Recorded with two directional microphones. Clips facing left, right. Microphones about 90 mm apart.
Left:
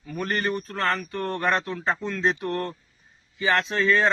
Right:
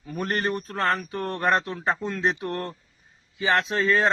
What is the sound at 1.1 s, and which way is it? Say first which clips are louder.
Speech: left 1 dB; 10° right (ahead or behind).